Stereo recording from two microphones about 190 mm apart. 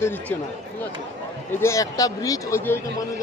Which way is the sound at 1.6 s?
15° left (ahead or behind).